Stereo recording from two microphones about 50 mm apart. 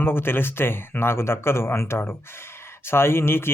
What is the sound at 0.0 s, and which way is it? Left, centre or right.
Speech, left.